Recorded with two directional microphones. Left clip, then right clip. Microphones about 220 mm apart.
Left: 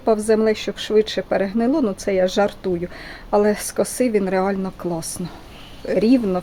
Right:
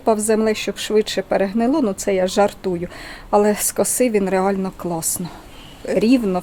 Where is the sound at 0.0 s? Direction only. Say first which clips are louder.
Even; 5° right (ahead or behind).